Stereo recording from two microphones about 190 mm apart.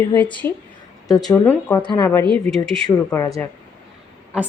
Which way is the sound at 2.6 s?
5° left (ahead or behind).